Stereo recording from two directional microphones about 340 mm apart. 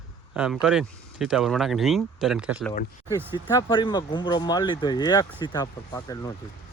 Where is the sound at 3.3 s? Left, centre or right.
Centre.